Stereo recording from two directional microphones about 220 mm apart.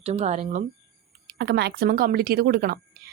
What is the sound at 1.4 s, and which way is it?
Speech, 50° right (ahead or behind).